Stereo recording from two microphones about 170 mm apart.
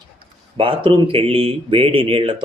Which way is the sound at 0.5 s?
30° right (ahead or behind).